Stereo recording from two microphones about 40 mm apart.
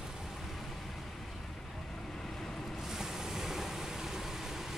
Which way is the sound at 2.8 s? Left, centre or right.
Centre.